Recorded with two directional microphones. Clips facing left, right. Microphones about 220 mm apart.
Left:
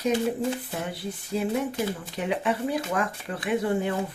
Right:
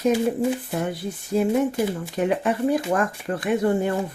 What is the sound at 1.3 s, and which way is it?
Speech, 50° right (ahead or behind).